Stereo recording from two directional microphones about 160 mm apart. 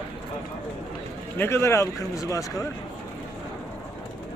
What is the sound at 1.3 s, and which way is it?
Speech, 15° left (ahead or behind).